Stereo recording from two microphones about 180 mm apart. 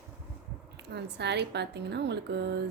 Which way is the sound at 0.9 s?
70° right (ahead or behind).